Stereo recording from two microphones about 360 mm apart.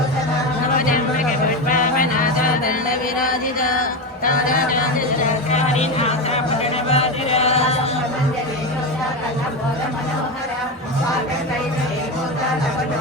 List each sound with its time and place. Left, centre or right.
1.6 s music: left
3.2 s chant: left
4.3 s a sound: left
5.5 s music: centre
6.8 s chant: centre